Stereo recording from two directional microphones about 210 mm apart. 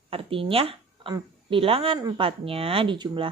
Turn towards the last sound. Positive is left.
turn(degrees=-20)  # may be behind; listen again after turning